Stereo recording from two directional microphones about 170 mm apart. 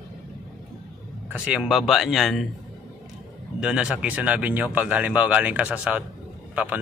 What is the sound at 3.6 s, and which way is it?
Speech, 5° right (ahead or behind).